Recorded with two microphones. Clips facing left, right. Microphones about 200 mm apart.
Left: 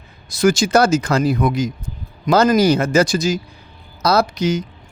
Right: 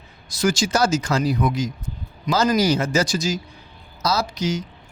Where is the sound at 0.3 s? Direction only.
55° left (ahead or behind).